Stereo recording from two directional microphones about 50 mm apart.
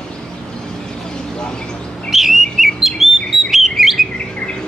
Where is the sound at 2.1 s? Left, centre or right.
Centre.